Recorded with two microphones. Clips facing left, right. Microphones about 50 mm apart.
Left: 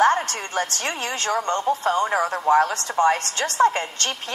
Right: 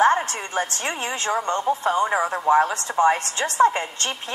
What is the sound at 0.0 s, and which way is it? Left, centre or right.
A woman's voice, right.